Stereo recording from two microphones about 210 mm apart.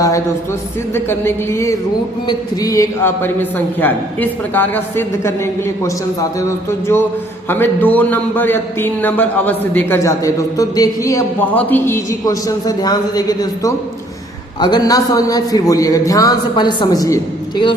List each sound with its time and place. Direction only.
0.9 s a man's voice: 10° left (ahead or behind)